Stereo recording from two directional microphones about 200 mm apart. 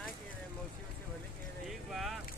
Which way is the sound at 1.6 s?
Centre (ahead or behind).